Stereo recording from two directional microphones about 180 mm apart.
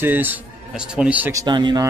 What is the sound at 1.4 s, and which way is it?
Speech, 25° right (ahead or behind).